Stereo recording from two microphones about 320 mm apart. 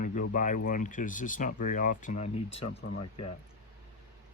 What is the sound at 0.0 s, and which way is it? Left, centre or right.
Speech, left.